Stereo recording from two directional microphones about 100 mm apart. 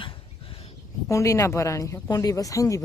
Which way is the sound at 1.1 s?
30° left (ahead or behind).